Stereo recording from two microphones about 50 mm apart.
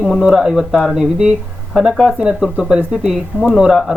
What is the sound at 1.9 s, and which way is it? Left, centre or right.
Speech, centre.